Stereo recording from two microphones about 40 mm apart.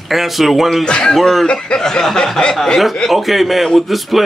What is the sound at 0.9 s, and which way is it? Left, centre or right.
Speech, left.